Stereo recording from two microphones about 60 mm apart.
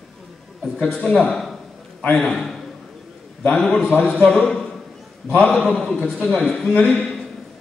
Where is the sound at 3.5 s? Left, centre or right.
Centre.